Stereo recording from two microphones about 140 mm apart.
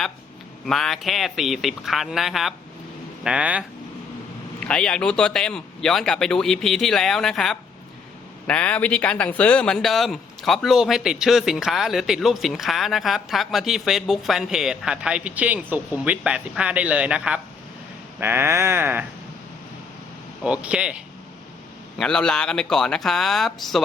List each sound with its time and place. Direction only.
0.6 s a man's voice: centre (ahead or behind)
4.6 s a man's voice: 5° left (ahead or behind); by 19.0 s 15° right (ahead or behind)
20.4 s speech: 10° right (ahead or behind)
21.9 s a man's voice: 5° left (ahead or behind)